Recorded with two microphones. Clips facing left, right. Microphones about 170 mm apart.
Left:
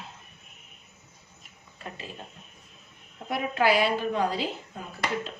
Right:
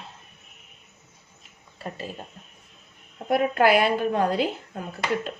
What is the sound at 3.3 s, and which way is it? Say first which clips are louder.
A woman's voice: right 5 dB; 55° right (ahead or behind).